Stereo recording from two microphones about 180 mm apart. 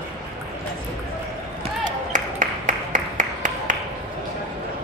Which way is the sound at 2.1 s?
45° right (ahead or behind).